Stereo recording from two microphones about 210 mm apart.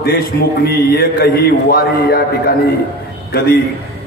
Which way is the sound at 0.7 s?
50° left (ahead or behind).